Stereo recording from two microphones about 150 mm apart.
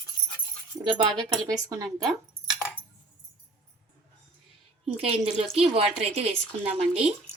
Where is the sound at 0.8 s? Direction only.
30° right (ahead or behind).